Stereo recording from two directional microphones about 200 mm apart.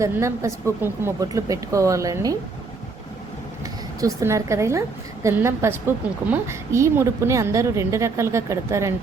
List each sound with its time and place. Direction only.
0.0 s a woman's voice: 15° right (ahead or behind)
3.6 s a woman's voice: 15° right (ahead or behind)